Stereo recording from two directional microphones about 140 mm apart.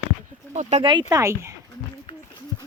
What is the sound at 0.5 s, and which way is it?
Speech, 55° right (ahead or behind).